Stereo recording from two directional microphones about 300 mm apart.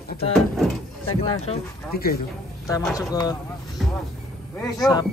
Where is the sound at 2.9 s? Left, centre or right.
Centre.